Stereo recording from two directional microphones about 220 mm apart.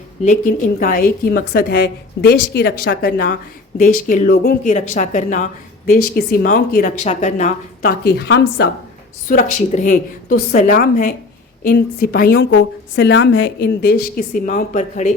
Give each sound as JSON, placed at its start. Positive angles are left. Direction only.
{"t": 0.3, "sound": "a woman's voice", "side_deg": 40}
{"t": 9.3, "sound": "a woman's voice", "side_deg": 35}